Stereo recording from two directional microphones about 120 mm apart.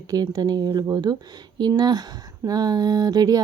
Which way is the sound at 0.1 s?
30° right (ahead or behind).